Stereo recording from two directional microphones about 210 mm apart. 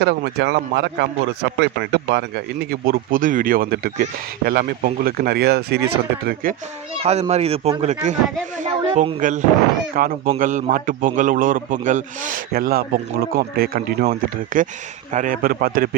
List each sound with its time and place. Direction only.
0.0 s a man's voice: 55° right (ahead or behind)
7.0 s a man's voice: 30° right (ahead or behind)
9.0 s a man's voice: 35° right (ahead or behind)